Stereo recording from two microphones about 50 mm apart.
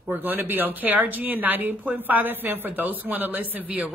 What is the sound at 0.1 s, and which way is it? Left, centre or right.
Speech, right.